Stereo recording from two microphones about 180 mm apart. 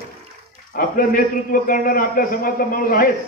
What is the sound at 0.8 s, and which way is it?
A man's voice, 50° left (ahead or behind).